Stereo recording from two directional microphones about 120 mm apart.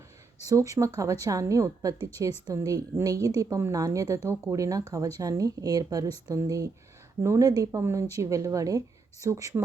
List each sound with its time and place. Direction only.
0.4 s speech: 25° right (ahead or behind)